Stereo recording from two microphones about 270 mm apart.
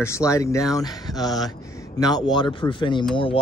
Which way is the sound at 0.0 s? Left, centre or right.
Centre.